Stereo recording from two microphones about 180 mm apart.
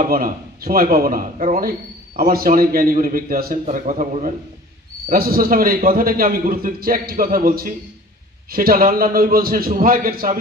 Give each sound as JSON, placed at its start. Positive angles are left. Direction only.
{"t": 0.0, "sound": "speech", "side_deg": -55}